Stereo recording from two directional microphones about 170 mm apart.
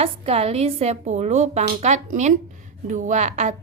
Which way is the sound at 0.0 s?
35° right (ahead or behind).